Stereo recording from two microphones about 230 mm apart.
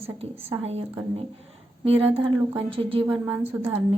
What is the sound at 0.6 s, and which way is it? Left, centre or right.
Speech, right.